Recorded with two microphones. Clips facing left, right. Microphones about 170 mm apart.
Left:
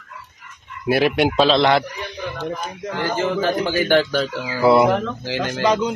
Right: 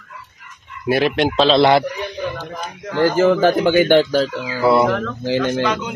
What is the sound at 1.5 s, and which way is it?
Speech, 10° right (ahead or behind).